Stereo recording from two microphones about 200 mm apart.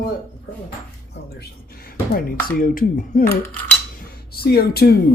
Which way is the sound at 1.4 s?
50° left (ahead or behind).